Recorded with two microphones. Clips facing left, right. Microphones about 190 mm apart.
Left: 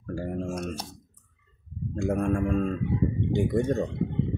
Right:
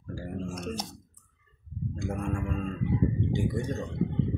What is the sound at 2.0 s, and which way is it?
Speech, 60° left (ahead or behind).